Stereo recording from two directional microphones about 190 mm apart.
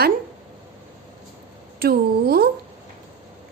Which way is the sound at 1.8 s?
55° right (ahead or behind).